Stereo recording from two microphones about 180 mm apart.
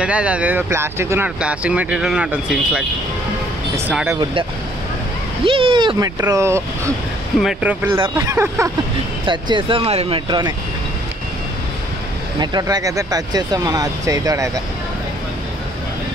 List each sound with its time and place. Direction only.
0.0 s speech: 5° right (ahead or behind)
3.9 s speech: 10° right (ahead or behind)
5.4 s speech: 30° right (ahead or behind)
7.3 s speech: 5° right (ahead or behind); by 10.5 s 25° right (ahead or behind)
12.4 s speech: 20° right (ahead or behind)